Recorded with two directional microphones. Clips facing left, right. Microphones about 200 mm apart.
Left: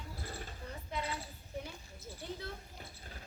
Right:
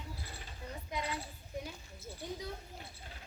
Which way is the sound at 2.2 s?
15° right (ahead or behind).